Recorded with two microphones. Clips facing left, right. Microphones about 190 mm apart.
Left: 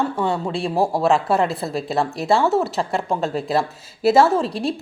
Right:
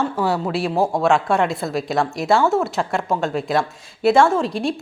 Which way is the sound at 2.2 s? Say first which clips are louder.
Even; centre (ahead or behind).